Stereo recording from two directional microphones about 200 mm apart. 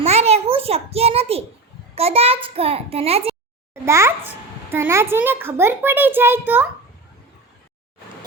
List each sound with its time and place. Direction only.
0.0 s a sound: 30° right (ahead or behind)
2.0 s a child's voice: 30° right (ahead or behind)
3.8 s a child's voice: 15° right (ahead or behind)